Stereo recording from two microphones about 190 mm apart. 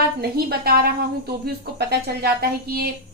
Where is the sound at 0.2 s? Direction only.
55° right (ahead or behind).